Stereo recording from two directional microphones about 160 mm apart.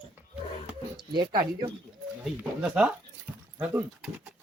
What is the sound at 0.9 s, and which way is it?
Speech, 30° right (ahead or behind).